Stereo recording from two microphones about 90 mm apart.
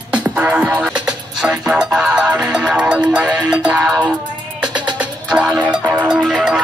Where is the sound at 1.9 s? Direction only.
5° left (ahead or behind).